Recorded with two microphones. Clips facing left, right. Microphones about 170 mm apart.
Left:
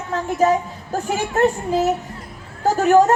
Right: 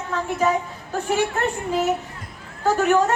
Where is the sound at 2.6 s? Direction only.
40° left (ahead or behind).